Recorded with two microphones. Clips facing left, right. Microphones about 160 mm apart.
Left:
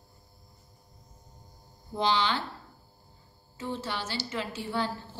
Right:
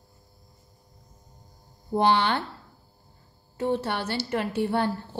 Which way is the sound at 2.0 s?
60° right (ahead or behind).